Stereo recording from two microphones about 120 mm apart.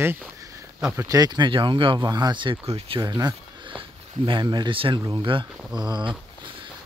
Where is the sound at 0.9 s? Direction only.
30° right (ahead or behind).